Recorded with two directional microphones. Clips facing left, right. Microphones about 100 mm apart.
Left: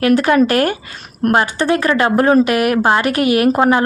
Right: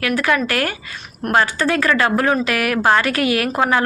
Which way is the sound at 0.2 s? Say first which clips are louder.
Left 6 dB; 30° left (ahead or behind).